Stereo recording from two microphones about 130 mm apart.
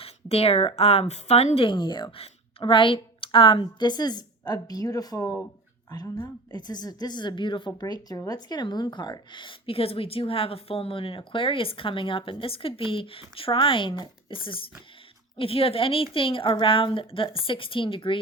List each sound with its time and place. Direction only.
0.0 s a woman's voice: 50° left (ahead or behind); by 5.3 s 25° left (ahead or behind)
6.5 s a woman's voice: 30° left (ahead or behind)